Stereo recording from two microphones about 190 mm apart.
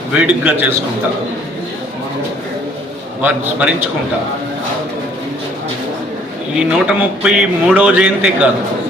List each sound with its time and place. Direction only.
0.1 s a man's voice: 5° right (ahead or behind)
3.2 s a man's voice: 5° right (ahead or behind)
6.6 s a man's voice: 5° right (ahead or behind)